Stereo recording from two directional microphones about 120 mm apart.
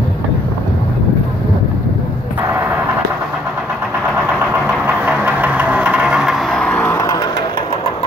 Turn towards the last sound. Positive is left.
turn(degrees=30)  # may be behind; listen again after turning